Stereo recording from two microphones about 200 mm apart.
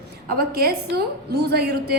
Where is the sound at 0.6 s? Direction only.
50° right (ahead or behind).